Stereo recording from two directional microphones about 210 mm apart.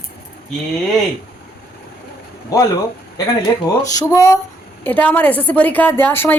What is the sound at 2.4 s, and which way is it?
A woman's voice, 15° left (ahead or behind).